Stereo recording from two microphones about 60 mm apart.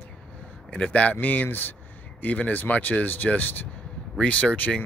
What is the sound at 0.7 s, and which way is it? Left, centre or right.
Speech, left.